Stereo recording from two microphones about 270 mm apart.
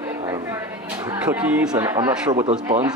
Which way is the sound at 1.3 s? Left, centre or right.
Centre.